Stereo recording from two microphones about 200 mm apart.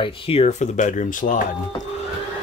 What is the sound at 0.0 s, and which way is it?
Speech, 30° left (ahead or behind).